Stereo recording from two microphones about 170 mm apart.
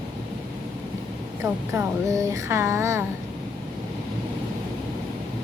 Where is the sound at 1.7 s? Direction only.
15° right (ahead or behind).